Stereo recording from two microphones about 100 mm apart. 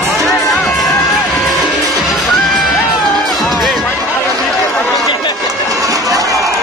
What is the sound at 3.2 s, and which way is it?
Music, centre (ahead or behind).